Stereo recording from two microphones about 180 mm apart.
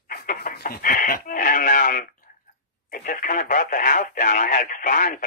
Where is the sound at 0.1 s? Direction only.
55° left (ahead or behind).